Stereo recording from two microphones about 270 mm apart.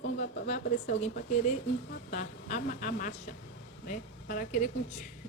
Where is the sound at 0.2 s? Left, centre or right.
Left.